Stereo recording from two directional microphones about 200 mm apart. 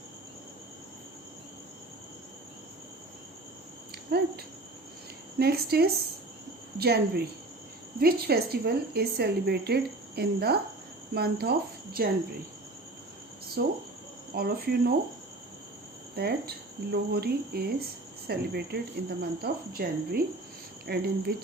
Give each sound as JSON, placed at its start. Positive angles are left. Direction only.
{"t": 4.1, "sound": "a woman's voice", "side_deg": -50}
{"t": 5.4, "sound": "a woman's voice", "side_deg": -50}
{"t": 13.6, "sound": "a woman's voice", "side_deg": -55}
{"t": 16.1, "sound": "a woman's voice", "side_deg": -50}